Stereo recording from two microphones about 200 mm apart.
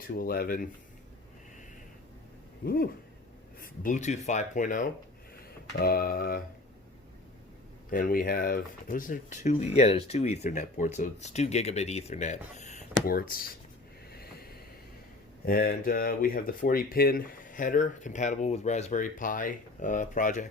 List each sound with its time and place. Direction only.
0.1 s speech: 50° left (ahead or behind)
2.6 s speech: 50° left (ahead or behind)
7.9 s speech: 45° left (ahead or behind)
14.1 s a sound: 50° left (ahead or behind)
15.4 s speech: 45° left (ahead or behind)